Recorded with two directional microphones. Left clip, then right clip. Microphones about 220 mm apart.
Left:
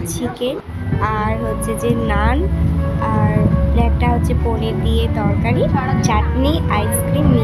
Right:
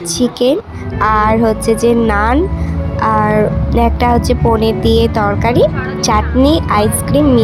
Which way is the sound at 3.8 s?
25° right (ahead or behind).